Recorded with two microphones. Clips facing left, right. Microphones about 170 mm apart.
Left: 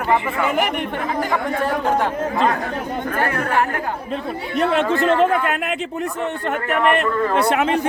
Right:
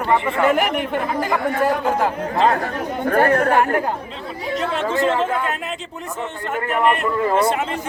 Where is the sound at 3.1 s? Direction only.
45° right (ahead or behind).